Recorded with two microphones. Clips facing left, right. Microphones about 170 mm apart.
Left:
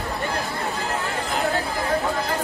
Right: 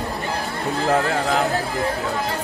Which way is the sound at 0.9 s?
85° right.